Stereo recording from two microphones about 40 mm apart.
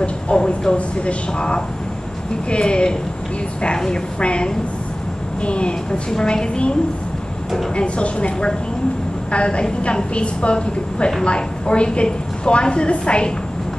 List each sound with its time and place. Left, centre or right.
0.0 s a woman's voice: left
7.7 s a woman's voice: left